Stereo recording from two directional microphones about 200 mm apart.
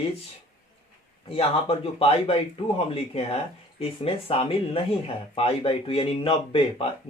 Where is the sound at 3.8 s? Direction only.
30° left (ahead or behind).